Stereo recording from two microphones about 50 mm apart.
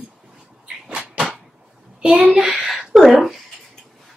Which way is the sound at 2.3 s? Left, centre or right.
Right.